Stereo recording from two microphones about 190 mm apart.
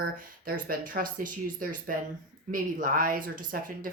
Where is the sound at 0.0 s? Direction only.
50° right (ahead or behind).